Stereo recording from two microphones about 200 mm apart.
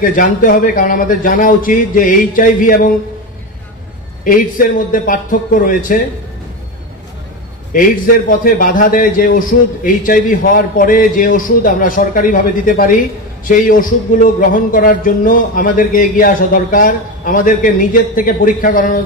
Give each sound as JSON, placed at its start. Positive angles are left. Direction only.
{"t": 0.0, "sound": "speech", "side_deg": 40}
{"t": 4.2, "sound": "speech", "side_deg": 45}
{"t": 7.7, "sound": "speech", "side_deg": 45}